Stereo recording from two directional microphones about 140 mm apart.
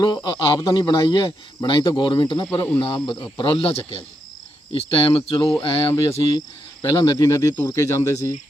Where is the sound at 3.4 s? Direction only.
35° left (ahead or behind).